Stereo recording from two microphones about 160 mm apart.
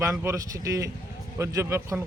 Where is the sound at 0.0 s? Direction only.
20° right (ahead or behind).